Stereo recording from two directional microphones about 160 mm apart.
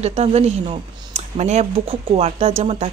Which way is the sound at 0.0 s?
40° right (ahead or behind).